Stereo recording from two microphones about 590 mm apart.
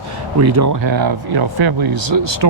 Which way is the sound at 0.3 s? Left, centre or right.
Right.